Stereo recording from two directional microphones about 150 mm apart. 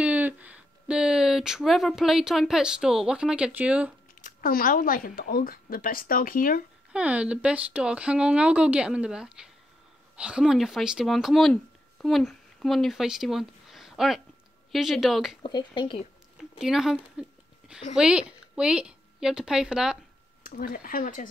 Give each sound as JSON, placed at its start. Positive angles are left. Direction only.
{"t": 0.0, "sound": "speech", "side_deg": -10}
{"t": 4.2, "sound": "speech", "side_deg": 70}
{"t": 6.9, "sound": "speech", "side_deg": -10}
{"t": 15.4, "sound": "speech", "side_deg": 30}
{"t": 16.5, "sound": "a sound", "side_deg": -5}
{"t": 17.9, "sound": "speech", "side_deg": -5}
{"t": 20.4, "sound": "speech", "side_deg": 70}